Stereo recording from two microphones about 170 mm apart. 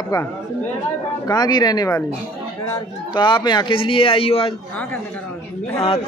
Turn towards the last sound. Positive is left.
turn(degrees=35)  # may be behind; listen again after turning